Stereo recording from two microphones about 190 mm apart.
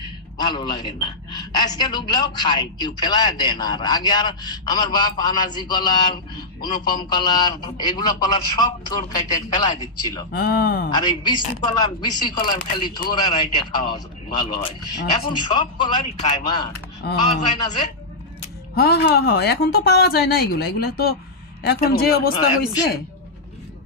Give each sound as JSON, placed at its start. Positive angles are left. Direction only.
{"t": 0.3, "sound": "a woman's voice", "side_deg": 25}
{"t": 10.3, "sound": "speech", "side_deg": 55}
{"t": 10.9, "sound": "a woman's voice", "side_deg": 20}
{"t": 18.7, "sound": "a woman's voice", "side_deg": 55}